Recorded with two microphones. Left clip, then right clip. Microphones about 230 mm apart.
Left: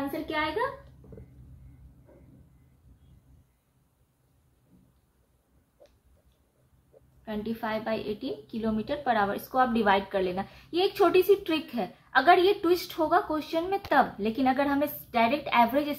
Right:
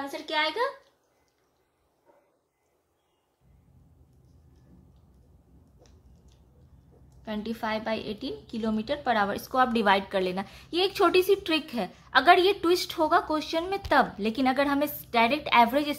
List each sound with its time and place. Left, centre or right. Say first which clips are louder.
0.3 s a woman's voice: right 3 dB; right
7.2 s a woman's voice: right 1 dB; right